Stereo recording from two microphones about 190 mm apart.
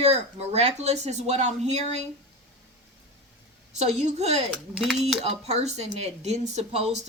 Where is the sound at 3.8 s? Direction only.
35° right (ahead or behind).